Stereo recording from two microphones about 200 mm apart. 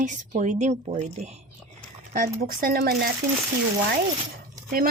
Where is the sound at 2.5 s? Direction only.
45° right (ahead or behind).